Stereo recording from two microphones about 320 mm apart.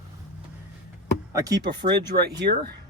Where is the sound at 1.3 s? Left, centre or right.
Centre.